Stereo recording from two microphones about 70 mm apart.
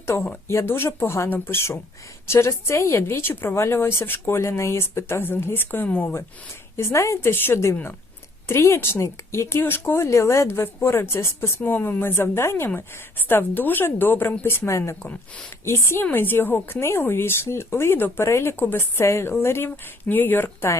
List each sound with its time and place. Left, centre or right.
0.1 s speech: left
6.7 s a woman's voice: left
15.0 s a woman's voice: centre
15.6 s speech: left
18.5 s speech: left